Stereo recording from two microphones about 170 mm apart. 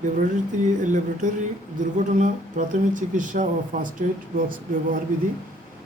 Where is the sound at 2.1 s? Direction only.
50° right (ahead or behind).